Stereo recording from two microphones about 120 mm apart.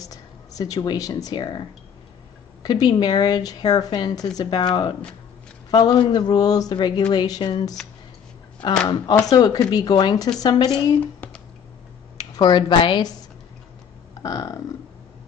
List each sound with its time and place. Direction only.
0.0 s speech: 30° left (ahead or behind)
2.6 s a woman's voice: 35° left (ahead or behind)
12.2 s speech: 35° left (ahead or behind)
14.2 s burping: 30° left (ahead or behind)